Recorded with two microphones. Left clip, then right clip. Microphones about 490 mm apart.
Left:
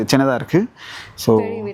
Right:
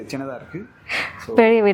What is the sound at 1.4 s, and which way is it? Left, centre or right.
Speech, right.